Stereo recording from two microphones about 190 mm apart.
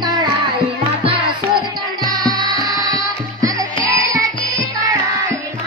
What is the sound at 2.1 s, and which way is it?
Music, 20° right (ahead or behind).